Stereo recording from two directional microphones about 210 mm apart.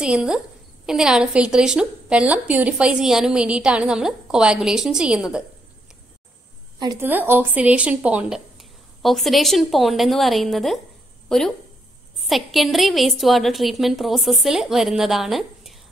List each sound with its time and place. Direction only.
0.0 s a woman's voice: 5° right (ahead or behind)
6.8 s a woman's voice: 20° right (ahead or behind)
7.1 s a woman's voice: 10° right (ahead or behind)